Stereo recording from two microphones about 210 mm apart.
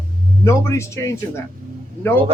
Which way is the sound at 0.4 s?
15° left (ahead or behind).